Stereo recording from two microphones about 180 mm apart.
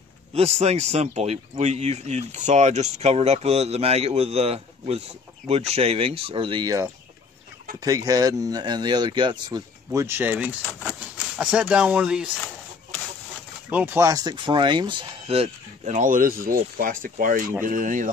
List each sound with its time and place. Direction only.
0.3 s speech: 35° right (ahead or behind); by 12.3 s 5° right (ahead or behind)
13.7 s speech: 10° right (ahead or behind); by 18.1 s 45° right (ahead or behind)